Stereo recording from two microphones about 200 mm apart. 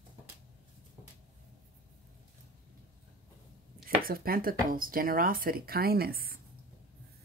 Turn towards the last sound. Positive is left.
turn(degrees=-50)  # may be behind; listen again after turning